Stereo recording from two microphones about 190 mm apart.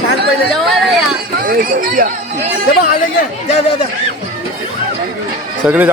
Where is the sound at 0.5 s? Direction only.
Centre (ahead or behind).